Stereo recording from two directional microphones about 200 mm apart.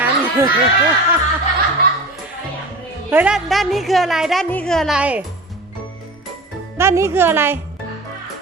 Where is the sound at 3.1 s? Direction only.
5° right (ahead or behind).